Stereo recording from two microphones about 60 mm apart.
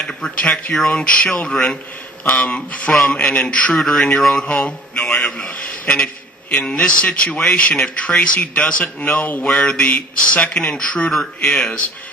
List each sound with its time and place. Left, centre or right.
0.0 s a sound: centre
0.5 s speech: centre
2.2 s speech: left
2.9 s speech: centre
4.5 s a man's voice: centre